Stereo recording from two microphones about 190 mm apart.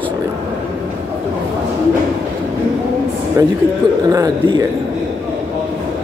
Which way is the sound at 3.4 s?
15° right (ahead or behind).